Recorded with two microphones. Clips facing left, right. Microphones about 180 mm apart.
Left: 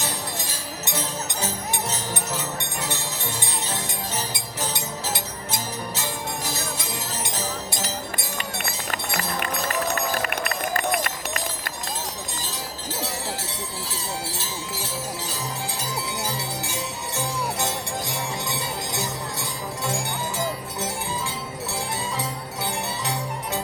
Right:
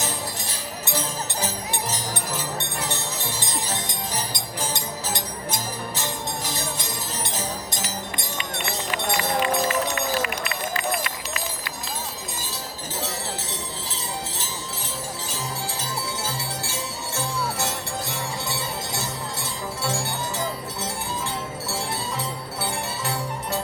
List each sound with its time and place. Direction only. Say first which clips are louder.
3.8 s music: even; 10° left (ahead or behind)
8.9 s run: right 4 dB; 55° left (ahead or behind)
16.2 s music: left 1 dB; 15° left (ahead or behind)